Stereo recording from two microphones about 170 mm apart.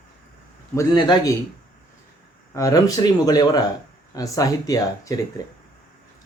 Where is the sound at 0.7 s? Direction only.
25° left (ahead or behind).